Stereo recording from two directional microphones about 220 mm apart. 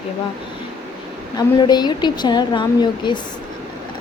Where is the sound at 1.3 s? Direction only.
20° left (ahead or behind).